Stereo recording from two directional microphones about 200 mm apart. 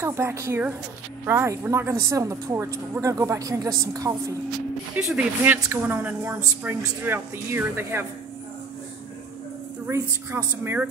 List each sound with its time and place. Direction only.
0.0 s speech: 15° right (ahead or behind)
4.9 s speech: 5° right (ahead or behind)
9.8 s speech: 10° right (ahead or behind)